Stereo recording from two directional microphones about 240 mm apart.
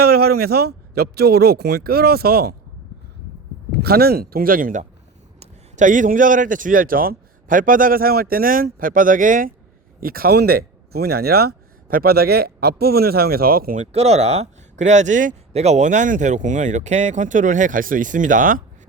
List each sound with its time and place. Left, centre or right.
0.0 s speech: right
3.8 s speech: right